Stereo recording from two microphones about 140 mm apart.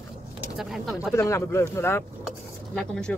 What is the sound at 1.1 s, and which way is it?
Speech, 20° left (ahead or behind).